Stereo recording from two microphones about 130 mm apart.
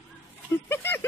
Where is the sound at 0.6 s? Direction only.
15° left (ahead or behind).